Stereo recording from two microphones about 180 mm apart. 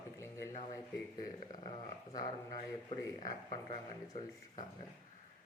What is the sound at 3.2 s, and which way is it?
Speech, 45° left (ahead or behind).